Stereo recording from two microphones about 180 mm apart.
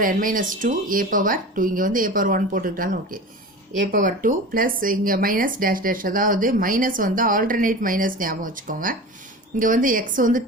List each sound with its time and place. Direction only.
0.0 s speech: 50° right (ahead or behind)